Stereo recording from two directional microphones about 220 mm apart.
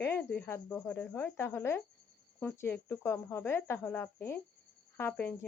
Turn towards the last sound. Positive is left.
turn(degrees=10)  # may be behind; listen again after turning